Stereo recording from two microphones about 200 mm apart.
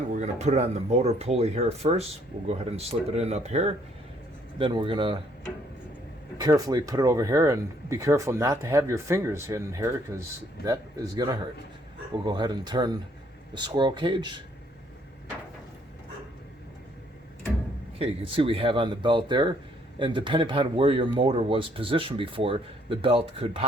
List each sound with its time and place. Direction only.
0.1 s speech: 35° right (ahead or behind)
6.3 s speech: 20° right (ahead or behind)
18.0 s speech: 25° right (ahead or behind)